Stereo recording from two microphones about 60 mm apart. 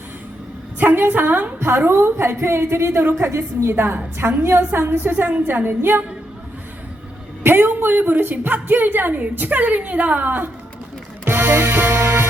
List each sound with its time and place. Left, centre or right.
0.8 s a woman's voice: right
1.5 s a woman's voice: right
7.4 s a woman's voice: right
11.3 s music: right